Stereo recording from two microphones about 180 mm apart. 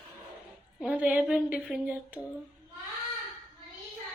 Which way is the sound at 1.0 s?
5° right (ahead or behind).